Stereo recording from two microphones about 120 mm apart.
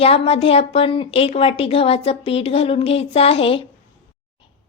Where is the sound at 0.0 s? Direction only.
55° left (ahead or behind).